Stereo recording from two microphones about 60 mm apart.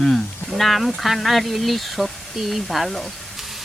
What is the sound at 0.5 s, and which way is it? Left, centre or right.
Speech, centre.